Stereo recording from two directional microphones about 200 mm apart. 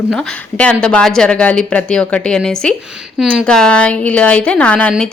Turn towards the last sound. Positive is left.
turn(degrees=5)  # may be behind; listen again after turning